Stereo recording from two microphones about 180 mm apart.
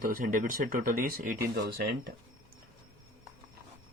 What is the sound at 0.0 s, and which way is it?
Speech, 50° right (ahead or behind).